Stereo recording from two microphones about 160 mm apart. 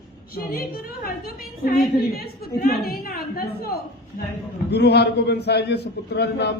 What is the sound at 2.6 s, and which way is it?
Speech, 75° left (ahead or behind).